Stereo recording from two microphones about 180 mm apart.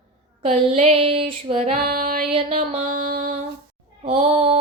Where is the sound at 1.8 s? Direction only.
55° right (ahead or behind).